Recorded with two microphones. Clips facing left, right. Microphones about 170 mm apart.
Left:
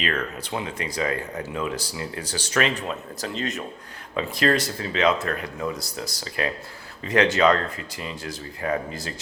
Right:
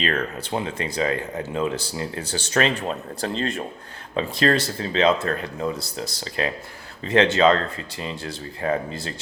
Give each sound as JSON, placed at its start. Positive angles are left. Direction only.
{"t": 0.0, "sound": "speech", "side_deg": -30}